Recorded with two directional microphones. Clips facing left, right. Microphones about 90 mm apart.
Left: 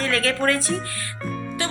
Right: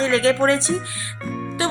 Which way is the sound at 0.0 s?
25° right (ahead or behind).